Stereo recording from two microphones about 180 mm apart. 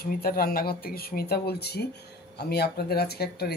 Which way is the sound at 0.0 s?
55° left (ahead or behind).